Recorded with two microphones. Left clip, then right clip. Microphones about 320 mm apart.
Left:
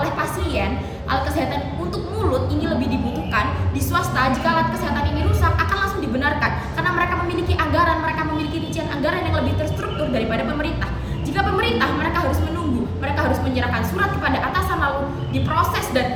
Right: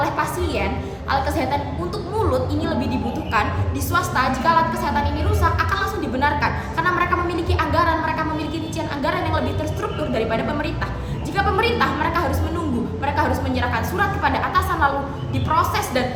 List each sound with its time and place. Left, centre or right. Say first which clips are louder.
0.0 s a sound: right 1 dB; centre
1.1 s a woman's voice: right 1 dB; centre
3.9 s a woman's voice: even; centre
10.2 s a woman's voice: right 3 dB; centre